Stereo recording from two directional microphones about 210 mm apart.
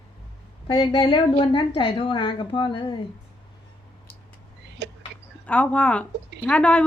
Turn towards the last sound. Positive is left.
turn(degrees=5)  # may be behind; listen again after turning